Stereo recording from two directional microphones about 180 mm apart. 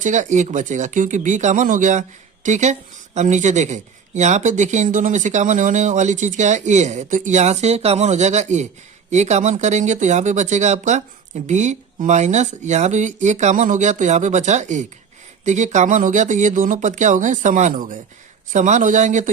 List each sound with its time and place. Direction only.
0.0 s speech: 45° right (ahead or behind)